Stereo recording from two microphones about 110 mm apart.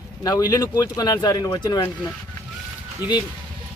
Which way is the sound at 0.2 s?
35° left (ahead or behind).